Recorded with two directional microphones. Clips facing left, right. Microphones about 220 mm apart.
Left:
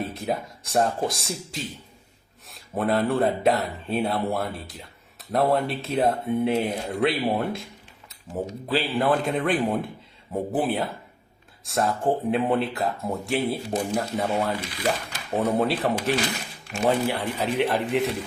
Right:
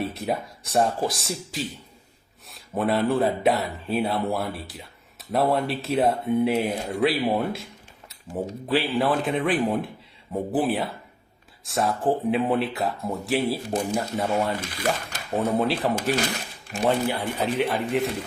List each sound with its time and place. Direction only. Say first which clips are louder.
0.0 s speech: right 1 dB; centre (ahead or behind)
14.7 s speech: even; 45° right (ahead or behind)
15.4 s speech: even; centre (ahead or behind)